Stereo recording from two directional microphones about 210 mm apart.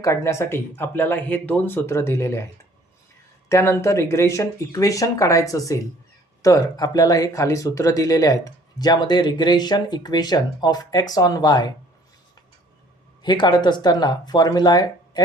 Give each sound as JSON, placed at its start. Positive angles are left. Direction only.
{"t": 0.0, "sound": "speech", "side_deg": 15}
{"t": 3.5, "sound": "speech", "side_deg": 15}
{"t": 13.2, "sound": "speech", "side_deg": 20}